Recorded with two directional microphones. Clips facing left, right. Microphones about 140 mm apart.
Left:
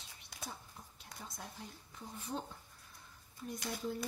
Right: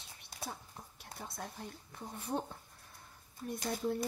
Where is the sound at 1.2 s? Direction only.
65° right (ahead or behind).